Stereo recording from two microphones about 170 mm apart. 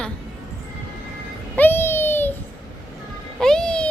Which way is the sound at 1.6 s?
10° left (ahead or behind).